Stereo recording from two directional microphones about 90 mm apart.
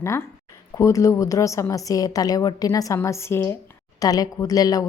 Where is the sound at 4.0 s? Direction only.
45° left (ahead or behind).